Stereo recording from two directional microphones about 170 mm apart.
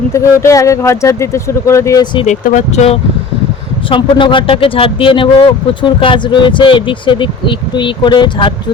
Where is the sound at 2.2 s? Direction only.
50° left (ahead or behind).